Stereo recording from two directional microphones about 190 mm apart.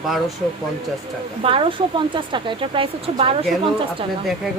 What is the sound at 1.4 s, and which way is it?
Speech, 30° right (ahead or behind).